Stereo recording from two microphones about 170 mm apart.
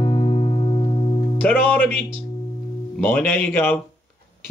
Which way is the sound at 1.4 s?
10° left (ahead or behind).